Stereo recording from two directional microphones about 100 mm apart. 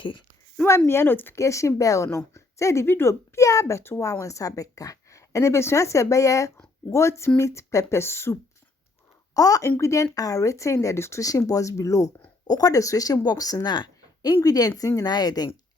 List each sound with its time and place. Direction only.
0.9 s speech: 20° left (ahead or behind)
9.3 s speech: 35° left (ahead or behind)